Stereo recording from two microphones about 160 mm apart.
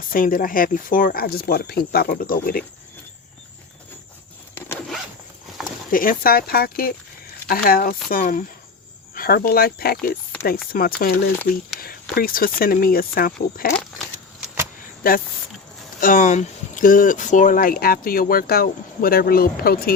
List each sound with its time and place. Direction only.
0.1 s speech: 60° left (ahead or behind)
5.9 s speech: 60° left (ahead or behind)
12.1 s speech: 65° left (ahead or behind)
15.0 s speech: 65° left (ahead or behind)